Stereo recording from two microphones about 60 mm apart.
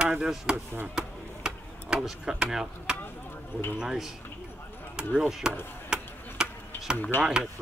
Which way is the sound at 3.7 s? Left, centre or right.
Centre.